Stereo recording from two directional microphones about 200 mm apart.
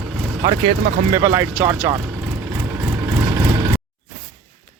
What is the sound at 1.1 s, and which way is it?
Speech, 15° right (ahead or behind).